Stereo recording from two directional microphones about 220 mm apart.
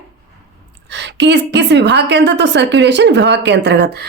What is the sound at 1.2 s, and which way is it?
Speech, 50° right (ahead or behind).